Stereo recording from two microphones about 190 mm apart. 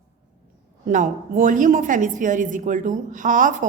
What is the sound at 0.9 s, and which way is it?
A woman's voice, 45° right (ahead or behind).